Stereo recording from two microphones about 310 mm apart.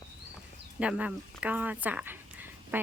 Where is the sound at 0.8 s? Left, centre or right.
Centre.